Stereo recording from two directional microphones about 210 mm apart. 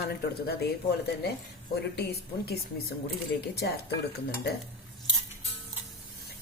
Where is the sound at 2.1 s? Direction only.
50° left (ahead or behind).